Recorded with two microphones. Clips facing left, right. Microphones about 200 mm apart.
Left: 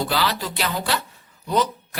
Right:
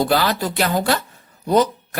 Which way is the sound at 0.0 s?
50° right (ahead or behind).